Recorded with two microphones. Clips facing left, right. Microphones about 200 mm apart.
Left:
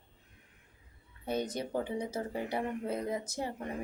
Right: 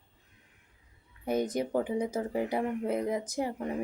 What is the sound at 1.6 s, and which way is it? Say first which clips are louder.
Speech: right 5 dB; 15° right (ahead or behind).